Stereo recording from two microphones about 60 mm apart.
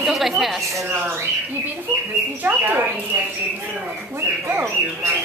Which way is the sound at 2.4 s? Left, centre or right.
Right.